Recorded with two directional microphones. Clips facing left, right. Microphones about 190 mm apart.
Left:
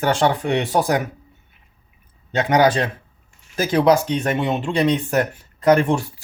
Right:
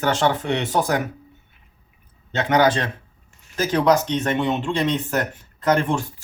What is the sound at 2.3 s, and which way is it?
Speech, 15° left (ahead or behind).